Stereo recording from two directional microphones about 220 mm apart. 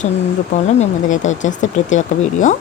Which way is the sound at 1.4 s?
35° left (ahead or behind).